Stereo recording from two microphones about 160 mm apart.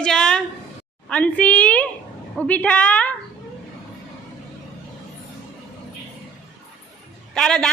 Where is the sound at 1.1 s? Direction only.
10° left (ahead or behind).